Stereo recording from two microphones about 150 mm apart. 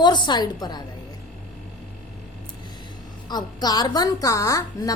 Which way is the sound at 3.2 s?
30° left (ahead or behind).